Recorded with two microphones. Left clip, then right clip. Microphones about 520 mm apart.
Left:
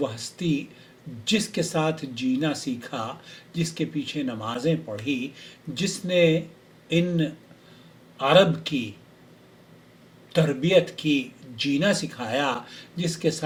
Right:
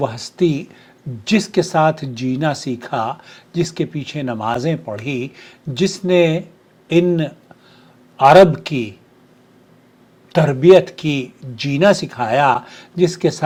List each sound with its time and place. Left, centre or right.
0.0 s speech: right
10.3 s speech: right